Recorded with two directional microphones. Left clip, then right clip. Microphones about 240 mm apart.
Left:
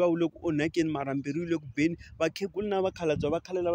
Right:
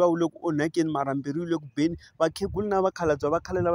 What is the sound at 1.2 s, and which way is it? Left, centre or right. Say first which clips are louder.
Speech: right 2 dB; centre.